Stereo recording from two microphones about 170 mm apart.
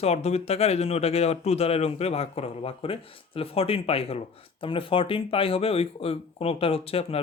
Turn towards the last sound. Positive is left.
turn(degrees=35)  # may be behind; listen again after turning